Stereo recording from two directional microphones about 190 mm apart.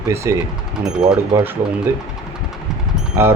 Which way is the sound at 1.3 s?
10° right (ahead or behind).